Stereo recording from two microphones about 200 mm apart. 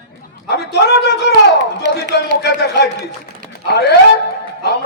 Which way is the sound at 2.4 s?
55° left (ahead or behind).